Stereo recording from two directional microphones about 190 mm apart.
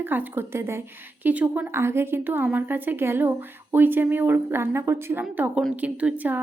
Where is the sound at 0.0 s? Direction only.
10° right (ahead or behind).